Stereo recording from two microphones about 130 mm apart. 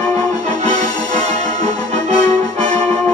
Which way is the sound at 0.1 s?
30° left (ahead or behind).